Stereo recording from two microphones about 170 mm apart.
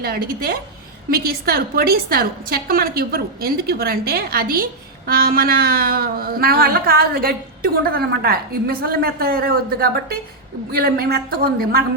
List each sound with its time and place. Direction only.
0.0 s a woman's voice: 65° right (ahead or behind)